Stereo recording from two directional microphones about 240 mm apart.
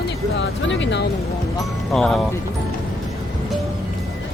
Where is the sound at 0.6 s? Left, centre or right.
Left.